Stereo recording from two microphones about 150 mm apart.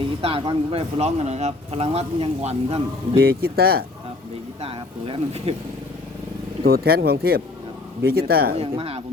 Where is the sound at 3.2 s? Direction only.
90° right.